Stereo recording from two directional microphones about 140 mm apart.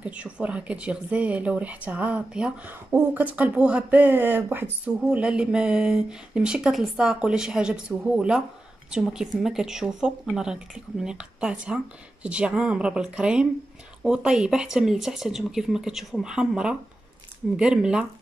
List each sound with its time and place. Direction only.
0.0 s speech: 10° right (ahead or behind)